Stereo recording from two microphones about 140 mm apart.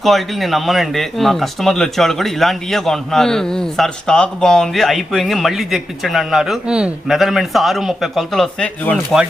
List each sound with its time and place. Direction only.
0.0 s speech: centre (ahead or behind)